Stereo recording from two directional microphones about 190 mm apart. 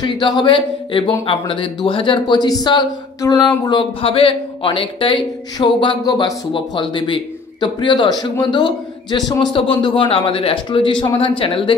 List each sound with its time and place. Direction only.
0.0 s speech: 25° left (ahead or behind)